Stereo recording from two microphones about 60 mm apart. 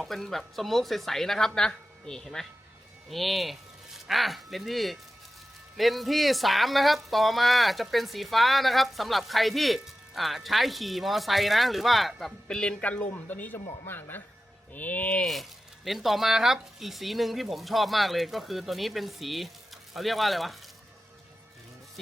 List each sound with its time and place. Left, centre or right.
0.0 s speech: centre
12.5 s speech: centre; by 15.2 s left
15.2 s speech: centre